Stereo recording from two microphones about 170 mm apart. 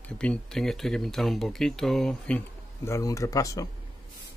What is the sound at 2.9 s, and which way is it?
Speech, 20° left (ahead or behind).